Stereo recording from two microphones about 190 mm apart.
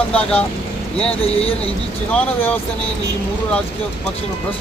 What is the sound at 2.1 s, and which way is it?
Speech, 10° left (ahead or behind).